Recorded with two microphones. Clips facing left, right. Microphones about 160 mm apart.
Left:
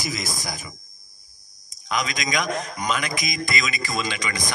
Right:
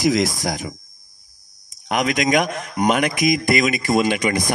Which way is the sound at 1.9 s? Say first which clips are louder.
Right 8 dB; 60° right (ahead or behind).